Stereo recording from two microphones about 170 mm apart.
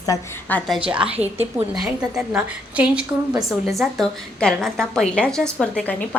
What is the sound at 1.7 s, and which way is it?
A woman's voice, centre (ahead or behind).